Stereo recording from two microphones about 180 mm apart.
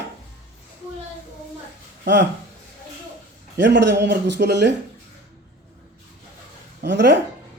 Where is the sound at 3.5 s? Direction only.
80° right.